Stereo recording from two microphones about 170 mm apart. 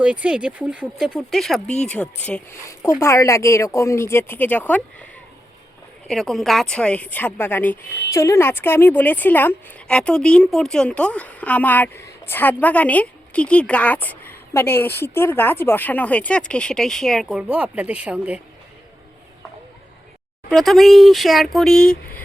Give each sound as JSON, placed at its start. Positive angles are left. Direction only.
{"t": 0.0, "sound": "speech", "side_deg": -5}
{"t": 3.0, "sound": "a woman's voice", "side_deg": 15}
{"t": 6.1, "sound": "a woman's voice", "side_deg": 0}
{"t": 20.5, "sound": "speech", "side_deg": 0}